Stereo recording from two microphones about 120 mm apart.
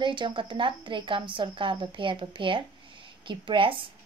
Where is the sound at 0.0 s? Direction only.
40° right (ahead or behind).